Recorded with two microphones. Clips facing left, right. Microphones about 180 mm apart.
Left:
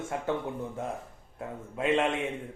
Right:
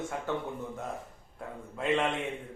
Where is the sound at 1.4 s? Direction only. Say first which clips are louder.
Left 4 dB; 20° left (ahead or behind).